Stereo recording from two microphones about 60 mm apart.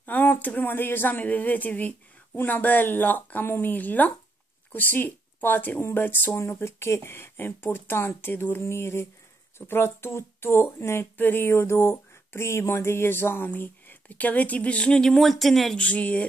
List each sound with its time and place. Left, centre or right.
0.0 s speech: left
6.3 s speech: left
11.1 s speech: left; by 15.8 s centre
15.8 s speech: left